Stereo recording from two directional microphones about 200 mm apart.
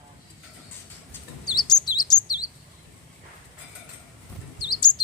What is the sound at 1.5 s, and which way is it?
Chirp, 20° left (ahead or behind).